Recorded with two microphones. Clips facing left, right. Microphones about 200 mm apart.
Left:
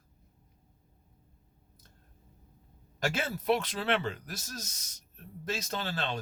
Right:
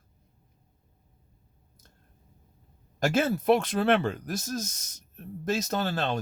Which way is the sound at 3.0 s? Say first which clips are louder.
Right 8 dB; 45° right (ahead or behind).